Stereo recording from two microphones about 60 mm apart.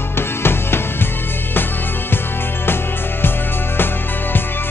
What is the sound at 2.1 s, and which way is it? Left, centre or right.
Music, left.